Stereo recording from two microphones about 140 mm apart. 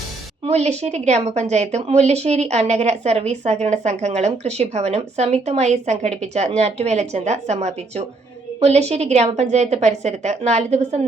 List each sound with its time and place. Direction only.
0.4 s a woman's voice: 50° right (ahead or behind)